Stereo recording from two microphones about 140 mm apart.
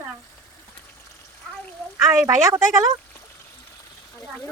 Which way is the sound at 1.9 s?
20° right (ahead or behind).